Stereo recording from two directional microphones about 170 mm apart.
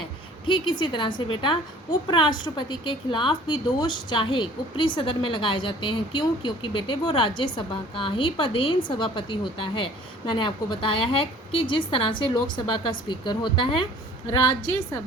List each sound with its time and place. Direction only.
0.4 s a woman's voice: 30° left (ahead or behind)